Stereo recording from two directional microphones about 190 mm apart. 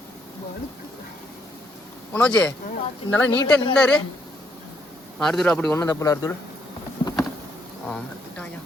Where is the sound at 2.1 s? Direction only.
10° left (ahead or behind).